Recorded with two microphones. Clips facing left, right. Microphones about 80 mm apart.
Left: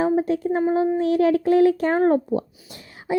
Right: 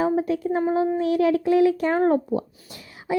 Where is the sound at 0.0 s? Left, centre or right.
Left.